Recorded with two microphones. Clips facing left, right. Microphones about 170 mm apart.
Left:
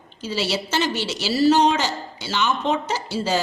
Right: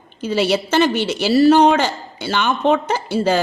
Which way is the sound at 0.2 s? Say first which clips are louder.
Right 7 dB; 55° right (ahead or behind).